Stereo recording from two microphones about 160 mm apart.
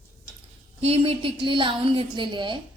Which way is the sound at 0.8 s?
35° right (ahead or behind).